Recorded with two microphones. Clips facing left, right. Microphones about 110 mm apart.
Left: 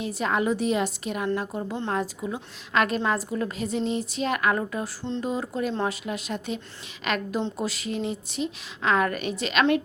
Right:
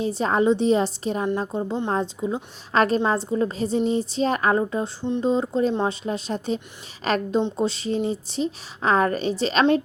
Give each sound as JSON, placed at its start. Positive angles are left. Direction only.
{"t": 0.0, "sound": "a woman's voice", "side_deg": -30}
{"t": 6.1, "sound": "a woman's voice", "side_deg": -30}
{"t": 7.3, "sound": "speech", "side_deg": -25}